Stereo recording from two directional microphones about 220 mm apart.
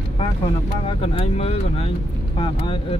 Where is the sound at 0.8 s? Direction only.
25° left (ahead or behind).